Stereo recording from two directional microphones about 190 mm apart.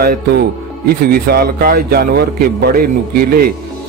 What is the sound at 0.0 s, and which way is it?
A man's voice, 55° right (ahead or behind).